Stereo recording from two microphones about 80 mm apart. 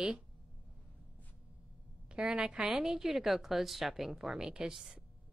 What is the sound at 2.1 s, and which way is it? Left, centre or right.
A woman's voice, centre.